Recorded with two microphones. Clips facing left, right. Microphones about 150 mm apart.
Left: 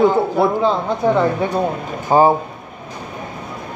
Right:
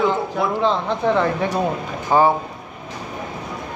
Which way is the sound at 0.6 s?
5° left (ahead or behind).